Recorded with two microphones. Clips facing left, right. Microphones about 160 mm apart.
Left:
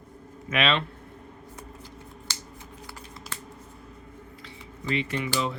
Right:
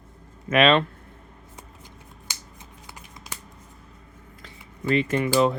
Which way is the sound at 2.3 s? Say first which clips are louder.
Even; 15° right (ahead or behind).